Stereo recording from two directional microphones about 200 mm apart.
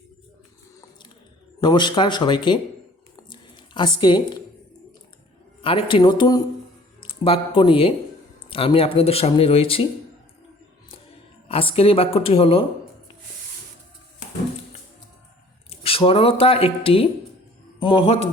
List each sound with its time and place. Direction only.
1.6 s speech: 25° left (ahead or behind)
3.2 s a sound: 25° left (ahead or behind)
5.6 s speech: 25° left (ahead or behind)
11.4 s speech: 25° left (ahead or behind)
15.7 s speech: 30° left (ahead or behind)